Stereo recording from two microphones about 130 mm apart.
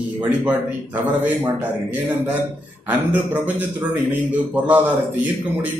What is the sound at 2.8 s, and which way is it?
Speech, 10° right (ahead or behind).